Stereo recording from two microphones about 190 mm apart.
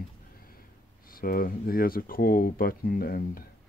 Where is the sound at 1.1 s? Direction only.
50° left (ahead or behind).